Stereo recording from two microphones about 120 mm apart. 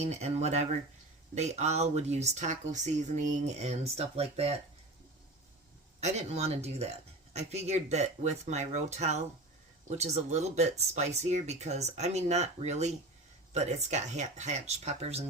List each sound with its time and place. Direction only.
0.0 s speech: 65° right (ahead or behind)
6.0 s speech: 65° right (ahead or behind)